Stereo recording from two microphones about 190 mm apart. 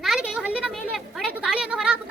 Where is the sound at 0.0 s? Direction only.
5° right (ahead or behind).